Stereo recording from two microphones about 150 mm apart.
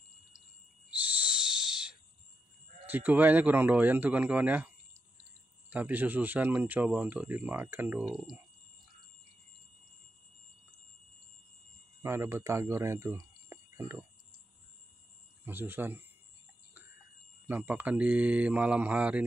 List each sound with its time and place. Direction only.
1.5 s owl: 5° right (ahead or behind)
2.9 s speech: 10° right (ahead or behind)
5.7 s speech: 10° right (ahead or behind)
8.1 s speech: centre (ahead or behind)
12.0 s speech: 15° right (ahead or behind)
15.4 s speech: 15° right (ahead or behind)
17.5 s speech: 10° right (ahead or behind)